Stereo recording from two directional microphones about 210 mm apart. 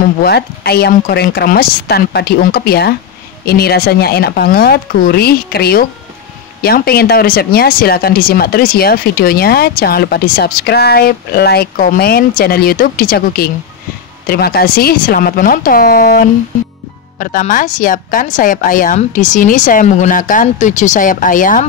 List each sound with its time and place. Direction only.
0.2 s speech: 50° left (ahead or behind)